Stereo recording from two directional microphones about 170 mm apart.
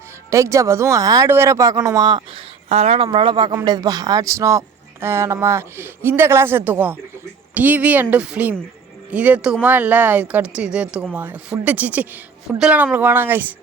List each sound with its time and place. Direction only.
0.3 s speech: 15° right (ahead or behind)
2.6 s speech: 40° right (ahead or behind); by 13.5 s 10° right (ahead or behind)